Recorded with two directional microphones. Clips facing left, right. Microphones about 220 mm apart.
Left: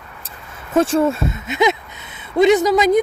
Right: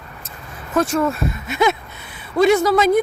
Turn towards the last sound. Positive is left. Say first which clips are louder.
# left 1 dB
turn(degrees=15)  # may be behind; listen again after turning